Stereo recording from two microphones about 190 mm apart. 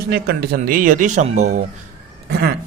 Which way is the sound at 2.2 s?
55° right (ahead or behind).